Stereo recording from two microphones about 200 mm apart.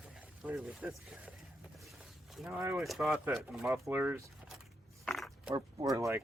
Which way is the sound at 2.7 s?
Centre (ahead or behind).